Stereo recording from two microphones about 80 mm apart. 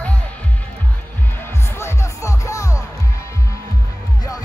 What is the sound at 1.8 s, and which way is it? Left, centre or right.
Music, left.